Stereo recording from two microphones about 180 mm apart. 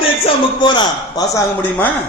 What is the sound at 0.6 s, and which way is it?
Speech, 25° left (ahead or behind).